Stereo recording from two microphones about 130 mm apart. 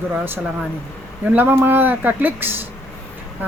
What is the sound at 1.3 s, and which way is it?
Speech, 15° right (ahead or behind).